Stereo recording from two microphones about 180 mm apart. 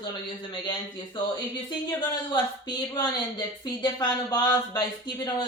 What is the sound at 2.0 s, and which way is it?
Speech, 25° left (ahead or behind).